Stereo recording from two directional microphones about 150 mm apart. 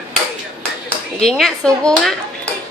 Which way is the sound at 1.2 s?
5° left (ahead or behind).